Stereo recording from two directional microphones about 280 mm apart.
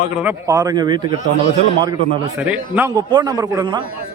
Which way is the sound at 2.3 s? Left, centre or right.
Centre.